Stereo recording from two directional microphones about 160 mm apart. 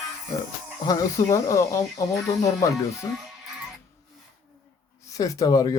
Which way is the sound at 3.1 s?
Centre (ahead or behind).